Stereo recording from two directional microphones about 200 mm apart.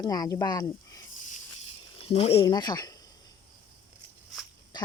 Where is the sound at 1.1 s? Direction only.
35° left (ahead or behind); by 2.9 s 20° left (ahead or behind).